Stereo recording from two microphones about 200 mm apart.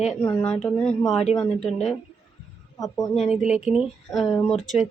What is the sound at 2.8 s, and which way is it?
Speech, 20° left (ahead or behind).